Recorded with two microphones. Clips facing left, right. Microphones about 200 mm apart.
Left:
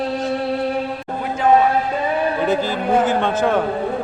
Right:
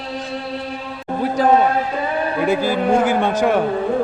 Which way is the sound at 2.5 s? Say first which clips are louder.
Right 4 dB; 10° right (ahead or behind).